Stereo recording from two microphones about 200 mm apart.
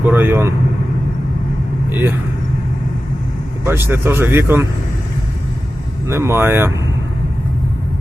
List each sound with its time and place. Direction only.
0.0 s speech: 10° right (ahead or behind)
1.9 s speech: 10° right (ahead or behind)
3.7 s speech: 10° right (ahead or behind)
6.1 s speech: 15° right (ahead or behind)